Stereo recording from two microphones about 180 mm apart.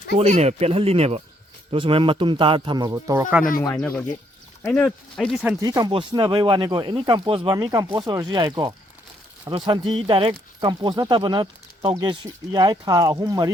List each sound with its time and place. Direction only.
0.2 s speech: 35° right (ahead or behind); by 3.3 s 15° right (ahead or behind)
3.8 s speech: 5° left (ahead or behind)
5.4 s speech: 10° right (ahead or behind)
5.6 s speech: 20° right (ahead or behind)